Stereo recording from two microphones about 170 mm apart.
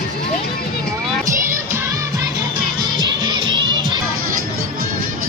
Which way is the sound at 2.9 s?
25° right (ahead or behind).